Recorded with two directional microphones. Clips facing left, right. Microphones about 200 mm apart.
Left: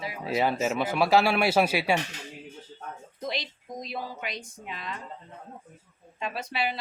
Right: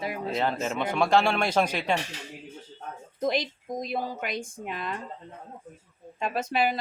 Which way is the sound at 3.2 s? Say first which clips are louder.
Right 7 dB; 50° right (ahead or behind).